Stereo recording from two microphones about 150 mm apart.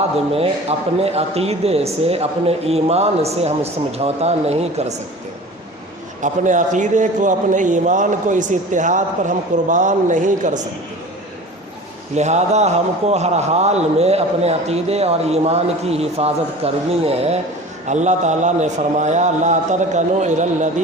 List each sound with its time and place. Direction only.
0.7 s a man's voice: 40° right (ahead or behind)
6.2 s a man's voice: 55° right (ahead or behind)
12.1 s a man's voice: 50° right (ahead or behind)